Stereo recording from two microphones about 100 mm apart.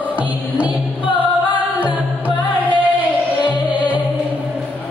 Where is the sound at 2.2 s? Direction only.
15° right (ahead or behind).